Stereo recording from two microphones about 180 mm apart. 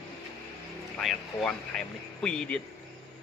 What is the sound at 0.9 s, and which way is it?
Speech, centre (ahead or behind).